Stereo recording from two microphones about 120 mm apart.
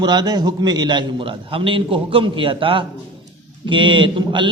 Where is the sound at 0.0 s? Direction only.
35° right (ahead or behind).